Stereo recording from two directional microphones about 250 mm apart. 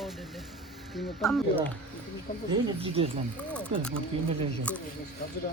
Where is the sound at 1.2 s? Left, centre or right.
Centre.